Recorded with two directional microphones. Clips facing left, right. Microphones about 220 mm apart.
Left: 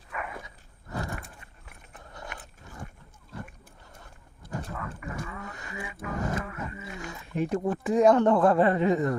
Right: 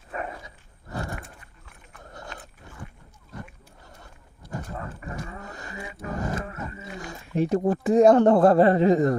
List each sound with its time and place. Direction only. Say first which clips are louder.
0.1 s dog: right 5 dB; 35° right (ahead or behind)
5.3 s speech: right 1 dB; 35° right (ahead or behind)